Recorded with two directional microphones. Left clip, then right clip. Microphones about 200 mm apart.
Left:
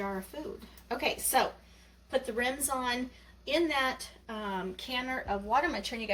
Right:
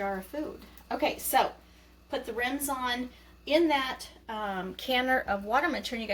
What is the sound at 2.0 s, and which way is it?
A woman's voice, 15° right (ahead or behind).